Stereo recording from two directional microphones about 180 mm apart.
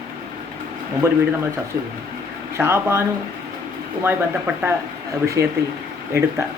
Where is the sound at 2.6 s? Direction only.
10° right (ahead or behind).